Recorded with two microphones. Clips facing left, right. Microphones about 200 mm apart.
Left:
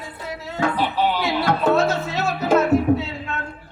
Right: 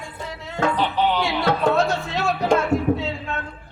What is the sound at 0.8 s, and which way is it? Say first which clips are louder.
A man's voice: right 1 dB; 10° left (ahead or behind).